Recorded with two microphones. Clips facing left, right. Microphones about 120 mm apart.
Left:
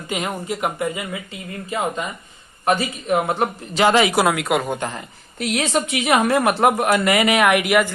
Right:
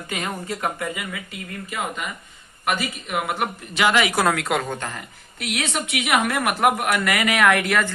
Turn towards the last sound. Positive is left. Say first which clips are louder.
# left 3 dB
turn(degrees=15)  # may be behind; listen again after turning